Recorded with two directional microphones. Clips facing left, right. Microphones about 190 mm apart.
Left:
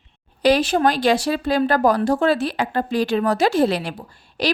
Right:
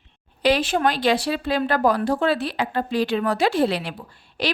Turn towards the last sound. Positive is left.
turn(degrees=40)  # may be behind; listen again after turning